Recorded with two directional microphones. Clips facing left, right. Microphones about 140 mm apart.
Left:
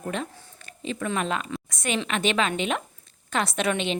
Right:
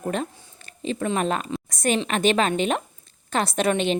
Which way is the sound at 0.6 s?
35° right (ahead or behind).